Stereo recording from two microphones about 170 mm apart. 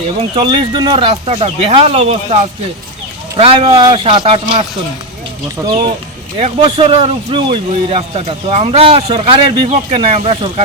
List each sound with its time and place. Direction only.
0.3 s speech: 30° right (ahead or behind)
5.6 s speech: 15° right (ahead or behind)
6.3 s speech: 35° right (ahead or behind)